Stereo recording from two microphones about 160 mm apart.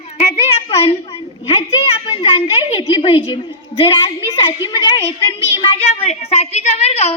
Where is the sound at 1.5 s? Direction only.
40° left (ahead or behind).